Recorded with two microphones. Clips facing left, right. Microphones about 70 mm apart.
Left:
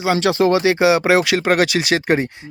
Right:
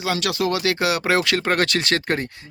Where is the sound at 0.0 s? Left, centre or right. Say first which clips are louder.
Left 7 dB; left.